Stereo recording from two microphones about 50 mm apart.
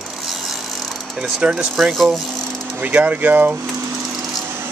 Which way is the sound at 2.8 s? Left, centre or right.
Right.